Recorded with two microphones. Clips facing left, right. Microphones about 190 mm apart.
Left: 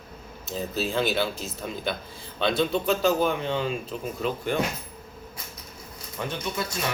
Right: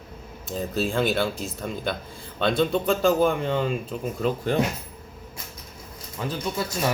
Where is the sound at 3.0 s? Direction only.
50° right (ahead or behind).